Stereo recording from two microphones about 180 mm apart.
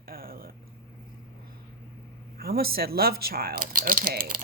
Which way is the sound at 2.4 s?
55° right (ahead or behind).